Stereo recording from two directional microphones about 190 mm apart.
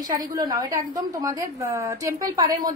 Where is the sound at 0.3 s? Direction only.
20° right (ahead or behind).